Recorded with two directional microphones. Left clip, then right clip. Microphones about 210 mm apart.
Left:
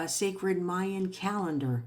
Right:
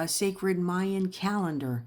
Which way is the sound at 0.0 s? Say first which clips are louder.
Right 2 dB; 45° right (ahead or behind).